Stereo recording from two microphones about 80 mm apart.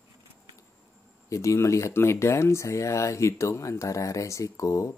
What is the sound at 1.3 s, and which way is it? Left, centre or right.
Speech, left.